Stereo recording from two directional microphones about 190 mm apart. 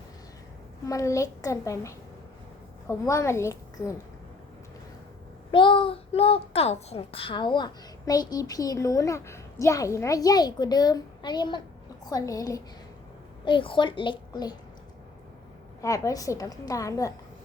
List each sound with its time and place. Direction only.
0.9 s a woman's voice: 15° left (ahead or behind)
5.5 s a child's voice: 25° left (ahead or behind)
15.8 s a woman's voice: 15° left (ahead or behind)